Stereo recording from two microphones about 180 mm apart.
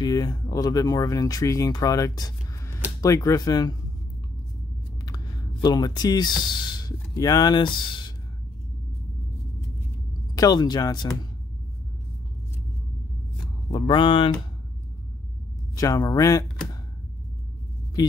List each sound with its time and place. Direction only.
0.0 s speech: 20° left (ahead or behind)
5.0 s speech: 20° left (ahead or behind)
10.3 s speech: 20° left (ahead or behind)
13.7 s speech: 25° left (ahead or behind)
15.7 s speech: 20° left (ahead or behind)